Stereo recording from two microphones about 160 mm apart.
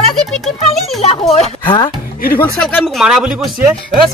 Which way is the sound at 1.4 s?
30° left (ahead or behind).